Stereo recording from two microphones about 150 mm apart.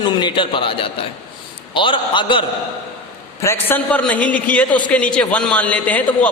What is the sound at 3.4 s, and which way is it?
A woman's voice, 15° left (ahead or behind).